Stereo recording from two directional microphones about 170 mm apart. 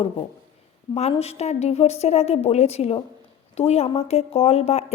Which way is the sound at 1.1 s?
40° left (ahead or behind).